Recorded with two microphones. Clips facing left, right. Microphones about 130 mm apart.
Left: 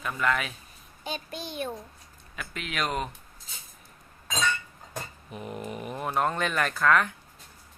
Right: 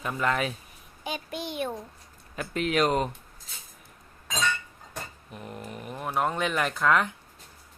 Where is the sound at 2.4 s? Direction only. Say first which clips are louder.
Right 8 dB; 35° right (ahead or behind).